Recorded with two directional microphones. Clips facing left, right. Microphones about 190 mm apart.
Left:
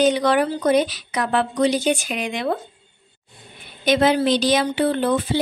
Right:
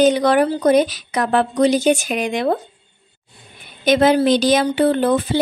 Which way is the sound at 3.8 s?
45° right (ahead or behind).